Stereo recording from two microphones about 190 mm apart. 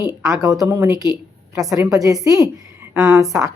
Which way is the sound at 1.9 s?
20° right (ahead or behind).